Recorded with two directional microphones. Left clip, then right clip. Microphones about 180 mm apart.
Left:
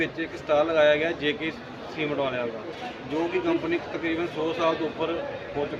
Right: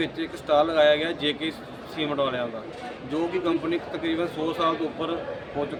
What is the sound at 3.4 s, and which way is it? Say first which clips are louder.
Speech: even; 20° right (ahead or behind).